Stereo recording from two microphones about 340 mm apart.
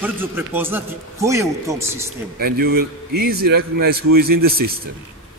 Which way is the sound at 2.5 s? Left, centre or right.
Right.